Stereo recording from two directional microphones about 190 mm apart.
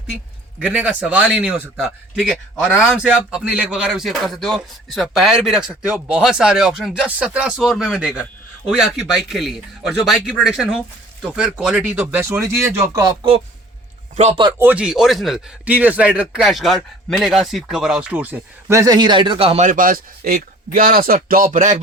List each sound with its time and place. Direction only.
0.6 s speech: 5° right (ahead or behind); by 13.4 s 25° right (ahead or behind)
14.2 s speech: 35° right (ahead or behind)
14.6 s speech: 5° right (ahead or behind); by 21.8 s 40° right (ahead or behind)